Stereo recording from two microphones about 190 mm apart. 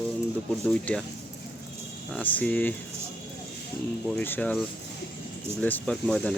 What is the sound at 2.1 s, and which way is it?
Speech, 10° left (ahead or behind).